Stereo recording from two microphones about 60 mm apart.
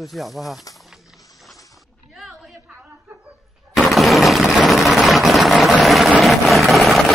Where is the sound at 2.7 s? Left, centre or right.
Right.